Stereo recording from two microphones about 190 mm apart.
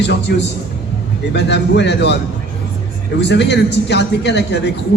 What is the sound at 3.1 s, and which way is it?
A man's voice, 65° left (ahead or behind).